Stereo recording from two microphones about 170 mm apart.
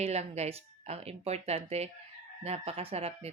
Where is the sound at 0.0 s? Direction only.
40° right (ahead or behind).